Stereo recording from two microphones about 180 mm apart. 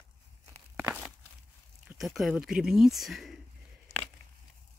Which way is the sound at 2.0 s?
Centre (ahead or behind).